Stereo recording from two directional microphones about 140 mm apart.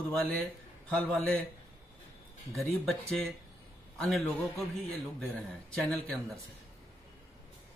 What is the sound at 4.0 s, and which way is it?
A man's voice, 5° left (ahead or behind).